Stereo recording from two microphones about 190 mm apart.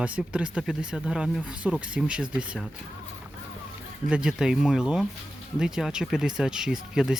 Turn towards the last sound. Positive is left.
turn(degrees=-5)  # may be behind; listen again after turning